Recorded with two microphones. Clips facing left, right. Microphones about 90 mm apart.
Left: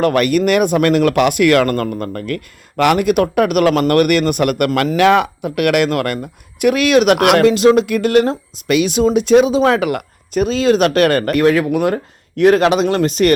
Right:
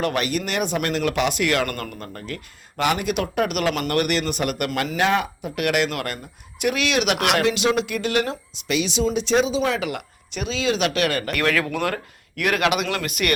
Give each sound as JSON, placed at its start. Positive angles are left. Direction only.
{"t": 0.0, "sound": "speech", "side_deg": 50}
{"t": 4.9, "sound": "speech", "side_deg": 70}
{"t": 11.3, "sound": "speech", "side_deg": 25}
{"t": 12.4, "sound": "speech", "side_deg": 30}